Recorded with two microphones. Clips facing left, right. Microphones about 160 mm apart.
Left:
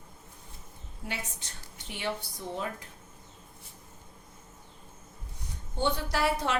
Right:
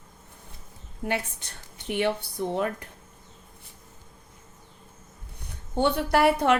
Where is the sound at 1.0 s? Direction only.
60° right (ahead or behind).